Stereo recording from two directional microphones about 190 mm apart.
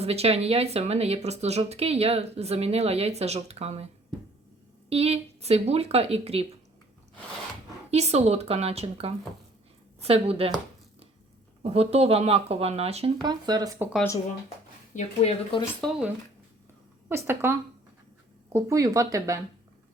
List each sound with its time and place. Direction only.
0.0 s speech: 30° right (ahead or behind)
4.9 s speech: 35° right (ahead or behind)
7.9 s speech: 35° right (ahead or behind)
11.6 s speech: 30° right (ahead or behind)
13.2 s speech: 20° right (ahead or behind)
14.9 s a woman's voice: 35° left (ahead or behind)
15.8 s speech: 5° left (ahead or behind)
17.1 s speech: 10° right (ahead or behind)